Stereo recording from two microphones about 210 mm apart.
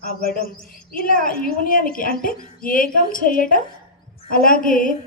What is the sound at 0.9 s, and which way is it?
A woman's voice, 40° left (ahead or behind).